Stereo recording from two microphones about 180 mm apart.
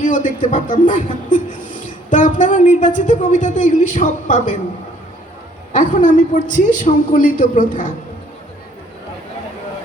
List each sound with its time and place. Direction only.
0.0 s a woman's voice: 45° left (ahead or behind)
5.7 s a woman's voice: 45° left (ahead or behind)